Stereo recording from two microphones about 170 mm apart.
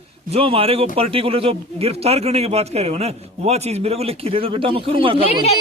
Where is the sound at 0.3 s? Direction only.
35° right (ahead or behind).